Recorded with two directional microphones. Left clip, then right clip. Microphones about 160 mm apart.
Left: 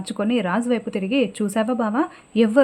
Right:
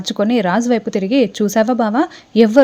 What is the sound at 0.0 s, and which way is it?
A woman's voice, 30° right (ahead or behind).